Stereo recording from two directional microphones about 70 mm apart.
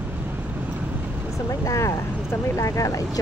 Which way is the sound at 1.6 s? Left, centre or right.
Left.